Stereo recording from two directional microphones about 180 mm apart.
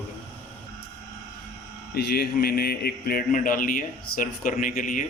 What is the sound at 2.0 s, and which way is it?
Speech, 60° left (ahead or behind).